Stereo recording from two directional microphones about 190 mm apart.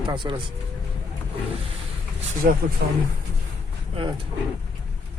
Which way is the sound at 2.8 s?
60° right (ahead or behind).